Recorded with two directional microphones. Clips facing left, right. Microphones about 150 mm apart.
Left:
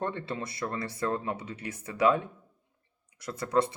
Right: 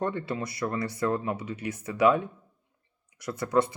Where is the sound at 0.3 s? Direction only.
25° left (ahead or behind).